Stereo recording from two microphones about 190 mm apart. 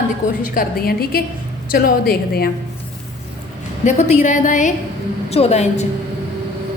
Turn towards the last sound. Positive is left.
turn(degrees=35)  # may be behind; listen again after turning